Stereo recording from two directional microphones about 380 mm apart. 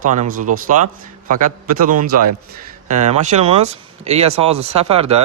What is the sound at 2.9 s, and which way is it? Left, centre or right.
Speech, centre.